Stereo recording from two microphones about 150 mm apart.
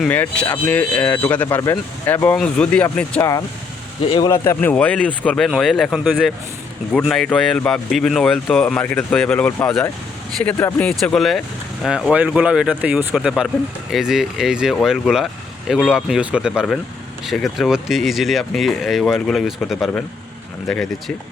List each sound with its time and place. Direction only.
0.1 s speech: 10° left (ahead or behind)
3.2 s speech: 25° left (ahead or behind)
4.0 s speech: 40° left (ahead or behind)
4.3 s speech: 15° left (ahead or behind)
10.6 s speech: 15° left (ahead or behind)
10.8 s speech: 5° left (ahead or behind)